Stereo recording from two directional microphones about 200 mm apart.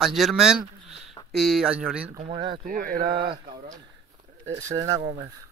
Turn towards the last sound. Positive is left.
turn(degrees=-15)  # may be behind; listen again after turning